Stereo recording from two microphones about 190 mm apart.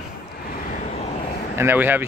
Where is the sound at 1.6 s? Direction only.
10° right (ahead or behind).